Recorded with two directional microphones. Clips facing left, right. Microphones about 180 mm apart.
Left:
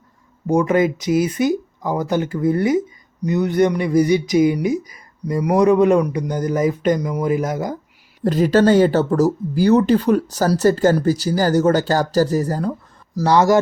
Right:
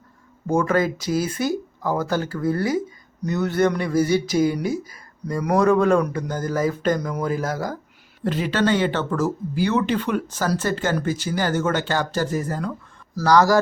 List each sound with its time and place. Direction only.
0.4 s speech: 15° left (ahead or behind)
8.2 s speech: 40° left (ahead or behind)
13.1 s speech: 25° left (ahead or behind)